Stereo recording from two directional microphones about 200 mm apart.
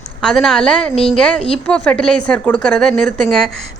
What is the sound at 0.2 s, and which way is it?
A woman's voice, 5° left (ahead or behind).